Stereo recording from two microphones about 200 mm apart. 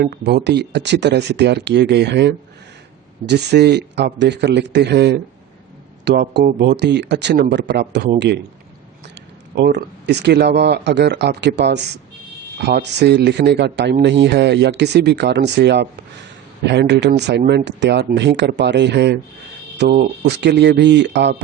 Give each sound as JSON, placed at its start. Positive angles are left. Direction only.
{"t": 0.0, "sound": "speech", "side_deg": -55}
{"t": 9.6, "sound": "speech", "side_deg": -60}